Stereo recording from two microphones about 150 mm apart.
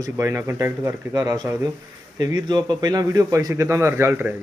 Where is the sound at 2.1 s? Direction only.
30° right (ahead or behind).